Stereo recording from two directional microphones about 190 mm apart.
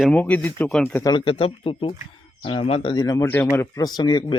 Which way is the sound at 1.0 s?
25° left (ahead or behind).